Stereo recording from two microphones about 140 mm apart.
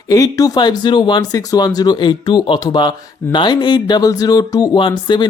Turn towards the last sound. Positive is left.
turn(degrees=35)  # may be behind; listen again after turning